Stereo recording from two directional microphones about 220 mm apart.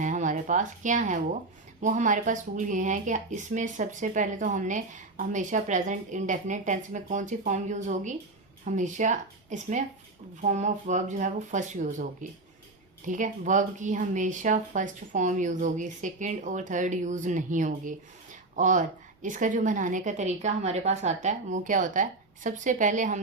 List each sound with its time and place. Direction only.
0.0 s a woman's voice: 35° right (ahead or behind)
13.1 s speech: 35° right (ahead or behind)